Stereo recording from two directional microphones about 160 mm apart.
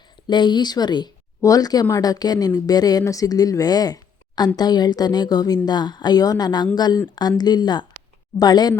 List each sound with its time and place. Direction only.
0.3 s speech: 30° left (ahead or behind)